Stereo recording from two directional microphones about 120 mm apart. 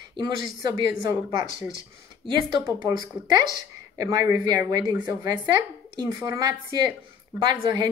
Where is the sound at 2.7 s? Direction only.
30° right (ahead or behind).